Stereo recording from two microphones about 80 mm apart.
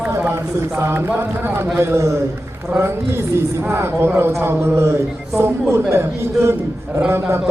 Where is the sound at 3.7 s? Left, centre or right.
Right.